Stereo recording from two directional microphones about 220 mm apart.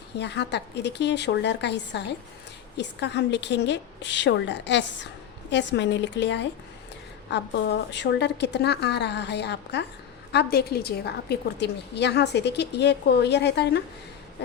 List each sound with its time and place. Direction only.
0.2 s a woman's voice: 50° left (ahead or behind)